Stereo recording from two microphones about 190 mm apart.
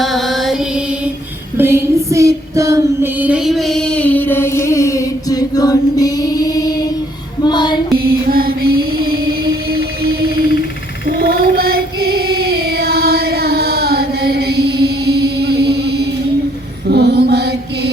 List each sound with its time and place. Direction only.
0.0 s mantra: centre (ahead or behind)
1.5 s female singing: 10° right (ahead or behind); by 6.8 s 20° left (ahead or behind)
7.4 s child singing: 20° left (ahead or behind)
7.9 s mantra: 50° right (ahead or behind)
11.0 s female singing: 55° right (ahead or behind)
16.8 s mantra: 60° right (ahead or behind)